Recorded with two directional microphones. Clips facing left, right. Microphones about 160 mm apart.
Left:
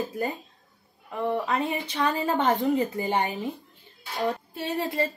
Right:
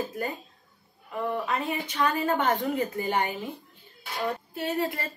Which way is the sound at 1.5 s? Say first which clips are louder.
Left 2 dB; 30° left (ahead or behind).